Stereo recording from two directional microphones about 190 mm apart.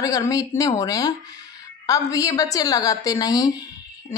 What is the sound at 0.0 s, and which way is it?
Speech, 20° left (ahead or behind).